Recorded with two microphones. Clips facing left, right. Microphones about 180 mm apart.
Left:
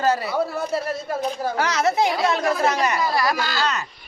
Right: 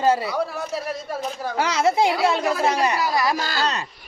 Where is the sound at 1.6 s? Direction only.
30° right (ahead or behind).